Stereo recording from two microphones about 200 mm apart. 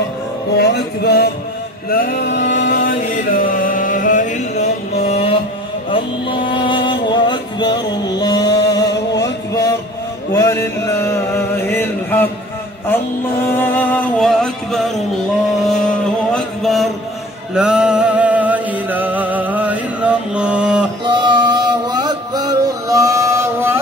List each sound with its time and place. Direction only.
0.6 s music: 55° left (ahead or behind)
1.9 s a sound: 50° left (ahead or behind)
2.7 s chant: 40° left (ahead or behind)
5.9 s music: 25° left (ahead or behind)
10.3 s chant: 15° left (ahead or behind)
13.6 s music: 5° left (ahead or behind)
16.3 s a sound: centre (ahead or behind)
17.6 s music: 5° right (ahead or behind)
21.0 s music: 20° right (ahead or behind)